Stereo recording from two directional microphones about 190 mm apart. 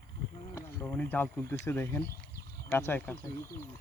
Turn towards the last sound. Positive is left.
turn(degrees=10)  # may be behind; listen again after turning